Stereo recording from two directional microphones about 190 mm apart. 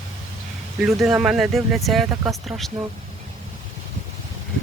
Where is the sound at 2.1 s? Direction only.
15° right (ahead or behind).